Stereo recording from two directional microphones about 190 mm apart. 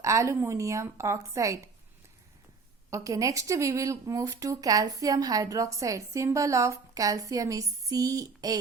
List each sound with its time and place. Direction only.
0.0 s speech: 15° right (ahead or behind)
2.9 s speech: 15° right (ahead or behind)